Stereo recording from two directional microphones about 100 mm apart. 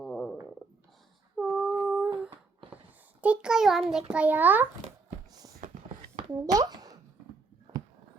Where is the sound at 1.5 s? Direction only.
5° left (ahead or behind).